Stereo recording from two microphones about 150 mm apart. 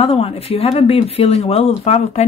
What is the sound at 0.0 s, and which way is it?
Speech, 40° left (ahead or behind).